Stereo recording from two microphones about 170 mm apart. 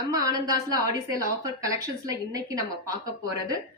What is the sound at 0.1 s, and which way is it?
A woman's voice, 20° right (ahead or behind).